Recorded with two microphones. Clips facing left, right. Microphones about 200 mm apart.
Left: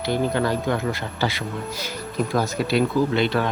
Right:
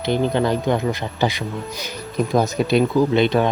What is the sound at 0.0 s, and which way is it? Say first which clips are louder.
Speech: right 3 dB; 20° right (ahead or behind).